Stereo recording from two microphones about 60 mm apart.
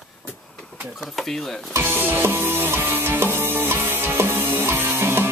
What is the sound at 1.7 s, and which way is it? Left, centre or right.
Music, right.